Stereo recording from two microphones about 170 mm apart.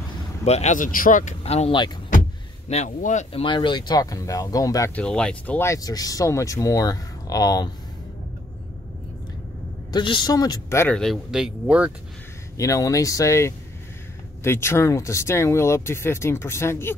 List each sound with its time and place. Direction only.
0.5 s speech: 40° left (ahead or behind)
3.4 s speech: 30° left (ahead or behind)
4.9 s speech: 5° left (ahead or behind); by 7.7 s 20° left (ahead or behind)
9.9 s speech: 25° left (ahead or behind)
11.0 s speech: centre (ahead or behind)
12.5 s speech: 20° left (ahead or behind)